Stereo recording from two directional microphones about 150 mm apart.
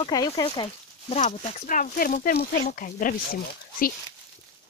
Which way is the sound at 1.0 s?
50° left (ahead or behind).